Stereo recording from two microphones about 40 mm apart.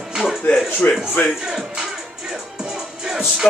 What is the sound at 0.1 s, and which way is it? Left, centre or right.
Music, centre.